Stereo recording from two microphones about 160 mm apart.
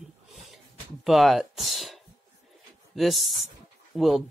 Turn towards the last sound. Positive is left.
turn(degrees=0)  # may be behind; listen again after turning